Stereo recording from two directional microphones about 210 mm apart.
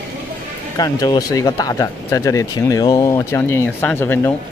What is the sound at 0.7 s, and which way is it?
Speech, 20° left (ahead or behind).